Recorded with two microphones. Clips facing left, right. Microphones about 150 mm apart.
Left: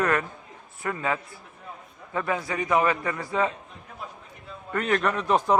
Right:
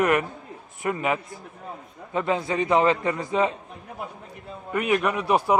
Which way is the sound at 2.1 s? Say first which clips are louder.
Right 4 dB; 20° right (ahead or behind).